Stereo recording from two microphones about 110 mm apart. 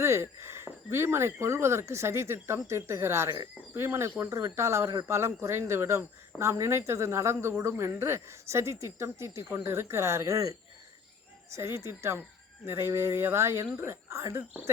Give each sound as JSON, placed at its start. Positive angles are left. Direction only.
{"t": 0.0, "sound": "speech", "side_deg": -25}
{"t": 11.5, "sound": "speech", "side_deg": -25}